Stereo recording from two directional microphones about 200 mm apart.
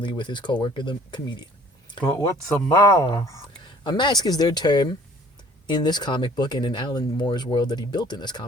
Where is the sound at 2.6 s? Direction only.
15° left (ahead or behind).